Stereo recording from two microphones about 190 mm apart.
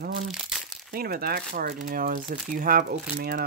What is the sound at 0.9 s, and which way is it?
Speech, 55° right (ahead or behind).